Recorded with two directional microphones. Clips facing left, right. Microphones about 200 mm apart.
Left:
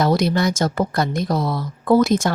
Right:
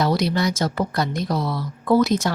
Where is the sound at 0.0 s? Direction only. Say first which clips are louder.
Left 3 dB; 50° left (ahead or behind).